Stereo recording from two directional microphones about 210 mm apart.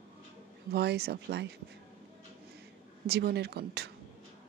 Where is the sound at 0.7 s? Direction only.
50° right (ahead or behind).